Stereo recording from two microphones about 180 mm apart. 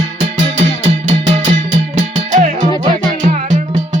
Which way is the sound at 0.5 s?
40° right (ahead or behind).